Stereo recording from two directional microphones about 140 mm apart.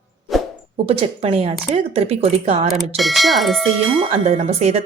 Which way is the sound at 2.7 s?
Centre (ahead or behind).